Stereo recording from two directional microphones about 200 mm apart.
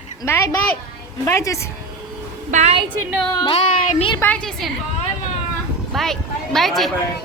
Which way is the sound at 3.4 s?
30° left (ahead or behind).